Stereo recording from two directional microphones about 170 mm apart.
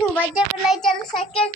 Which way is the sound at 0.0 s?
10° left (ahead or behind).